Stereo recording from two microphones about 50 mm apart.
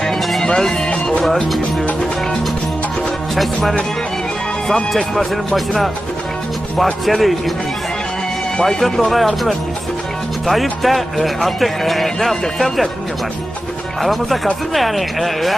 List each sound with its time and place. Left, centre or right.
0.0 s music: centre
0.4 s music: centre
1.2 s a man's voice: centre
3.3 s a man's voice: centre
7.0 s a man's voice: centre
8.6 s a man's voice: centre
14.0 s a man's voice: centre